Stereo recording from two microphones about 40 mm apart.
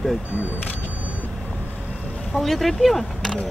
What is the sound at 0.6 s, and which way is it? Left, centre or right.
Speech, left.